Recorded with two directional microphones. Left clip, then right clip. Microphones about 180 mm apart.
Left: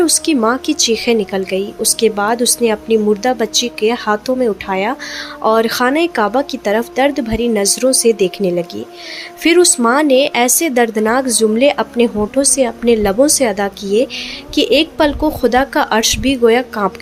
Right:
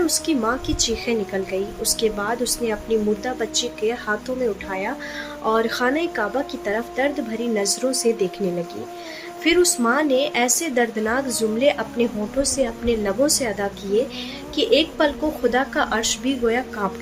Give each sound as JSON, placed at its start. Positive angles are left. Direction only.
{"t": 0.0, "sound": "a woman's voice", "side_deg": 45}
{"t": 9.4, "sound": "a woman's voice", "side_deg": 45}